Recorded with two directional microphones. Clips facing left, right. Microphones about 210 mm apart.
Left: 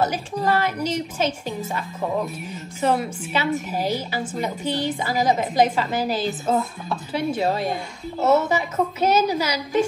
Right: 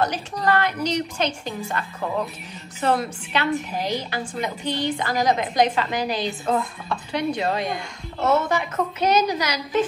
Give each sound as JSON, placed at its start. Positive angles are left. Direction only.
{"t": 0.0, "sound": "a woman's voice", "side_deg": 5}